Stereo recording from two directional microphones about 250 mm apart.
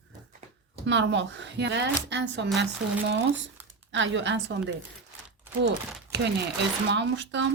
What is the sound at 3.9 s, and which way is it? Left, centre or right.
Speech, right.